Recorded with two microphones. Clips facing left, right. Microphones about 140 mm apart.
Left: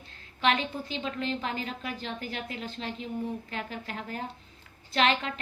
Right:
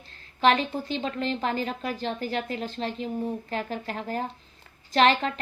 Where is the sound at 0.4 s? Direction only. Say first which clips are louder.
Right 5 dB; 40° right (ahead or behind).